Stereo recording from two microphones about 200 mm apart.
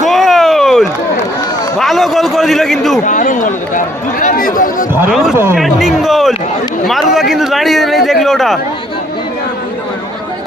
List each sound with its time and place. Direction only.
0.0 s a sound: centre (ahead or behind)
1.8 s a man's voice: centre (ahead or behind)
3.1 s speech: 40° left (ahead or behind)
5.6 s a man's voice: centre (ahead or behind)